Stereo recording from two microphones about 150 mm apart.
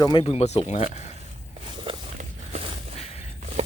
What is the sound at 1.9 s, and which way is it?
Walk, 35° right (ahead or behind).